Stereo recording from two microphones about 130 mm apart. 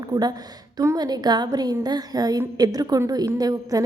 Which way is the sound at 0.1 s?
30° right (ahead or behind).